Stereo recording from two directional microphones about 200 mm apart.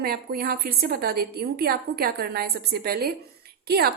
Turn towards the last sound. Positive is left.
turn(degrees=-50)  # may be behind; listen again after turning